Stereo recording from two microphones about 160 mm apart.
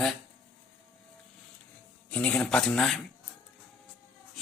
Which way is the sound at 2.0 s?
10° left (ahead or behind).